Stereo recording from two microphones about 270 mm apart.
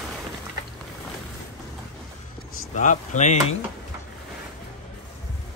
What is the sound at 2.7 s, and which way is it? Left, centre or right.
Speech, left.